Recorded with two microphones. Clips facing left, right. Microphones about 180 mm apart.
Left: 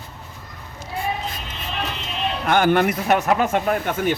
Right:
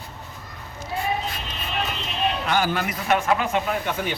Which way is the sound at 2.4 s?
55° left (ahead or behind).